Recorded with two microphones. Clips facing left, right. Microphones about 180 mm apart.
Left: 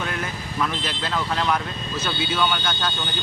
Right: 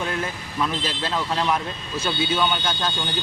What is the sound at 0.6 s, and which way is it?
A man's voice, 30° right (ahead or behind).